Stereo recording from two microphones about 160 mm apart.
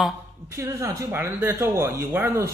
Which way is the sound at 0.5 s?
20° right (ahead or behind).